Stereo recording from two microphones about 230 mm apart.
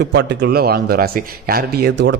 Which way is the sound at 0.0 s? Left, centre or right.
Right.